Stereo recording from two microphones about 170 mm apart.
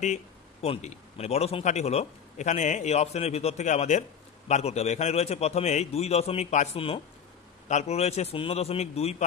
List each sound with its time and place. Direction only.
0.0 s speech: 40° left (ahead or behind)